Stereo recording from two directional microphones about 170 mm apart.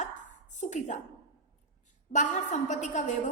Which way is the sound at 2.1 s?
45° left (ahead or behind).